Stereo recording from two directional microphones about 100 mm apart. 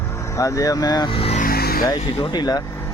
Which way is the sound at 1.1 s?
70° left (ahead or behind).